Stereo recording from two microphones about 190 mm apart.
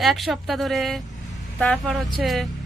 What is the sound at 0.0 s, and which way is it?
Speech, centre (ahead or behind).